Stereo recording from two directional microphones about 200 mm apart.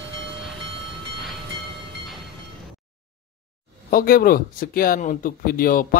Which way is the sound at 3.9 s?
45° left (ahead or behind).